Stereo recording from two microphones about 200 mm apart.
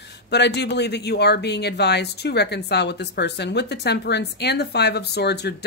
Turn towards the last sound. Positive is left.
turn(degrees=55)  # may be behind; listen again after turning